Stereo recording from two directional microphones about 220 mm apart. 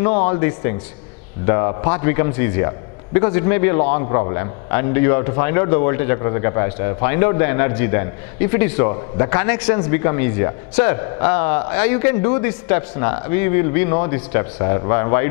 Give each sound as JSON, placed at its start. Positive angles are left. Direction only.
{"t": 0.3, "sound": "a man's voice", "side_deg": 15}